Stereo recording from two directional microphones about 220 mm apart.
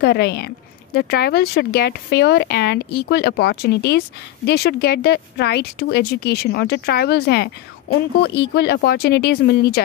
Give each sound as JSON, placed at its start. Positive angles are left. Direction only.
{"t": 0.0, "sound": "speech", "side_deg": 50}